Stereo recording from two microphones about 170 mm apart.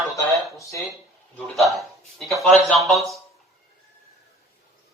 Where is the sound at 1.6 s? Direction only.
Centre (ahead or behind).